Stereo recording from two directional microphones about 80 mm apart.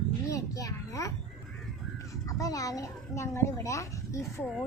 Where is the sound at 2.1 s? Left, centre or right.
Left.